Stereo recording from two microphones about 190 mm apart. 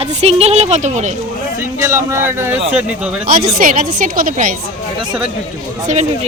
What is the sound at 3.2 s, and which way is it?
A woman's voice, 50° right (ahead or behind).